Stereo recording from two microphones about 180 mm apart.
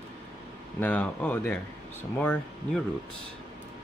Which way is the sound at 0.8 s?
5° left (ahead or behind).